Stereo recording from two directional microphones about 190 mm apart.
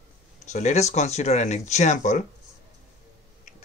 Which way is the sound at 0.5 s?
40° left (ahead or behind).